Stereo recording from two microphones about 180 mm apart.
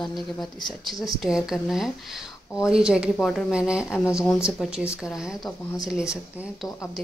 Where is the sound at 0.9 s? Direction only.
20° left (ahead or behind).